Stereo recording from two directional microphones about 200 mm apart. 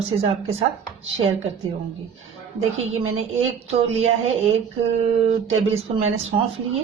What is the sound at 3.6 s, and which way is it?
Speech, 30° right (ahead or behind).